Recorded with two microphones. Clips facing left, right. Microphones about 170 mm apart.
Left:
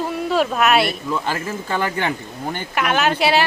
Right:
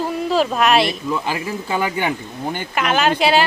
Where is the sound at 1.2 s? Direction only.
10° right (ahead or behind).